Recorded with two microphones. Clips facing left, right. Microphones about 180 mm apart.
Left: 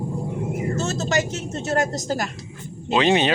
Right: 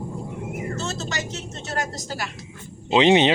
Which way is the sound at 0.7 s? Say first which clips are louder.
Left 6 dB; 45° left (ahead or behind).